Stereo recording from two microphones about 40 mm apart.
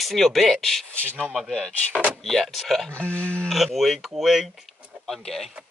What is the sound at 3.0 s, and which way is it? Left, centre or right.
Speech, left.